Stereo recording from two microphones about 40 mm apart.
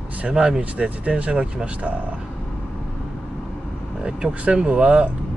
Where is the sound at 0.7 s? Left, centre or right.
Right.